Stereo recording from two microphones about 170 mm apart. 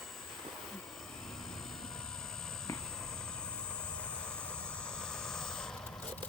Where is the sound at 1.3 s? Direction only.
5° left (ahead or behind).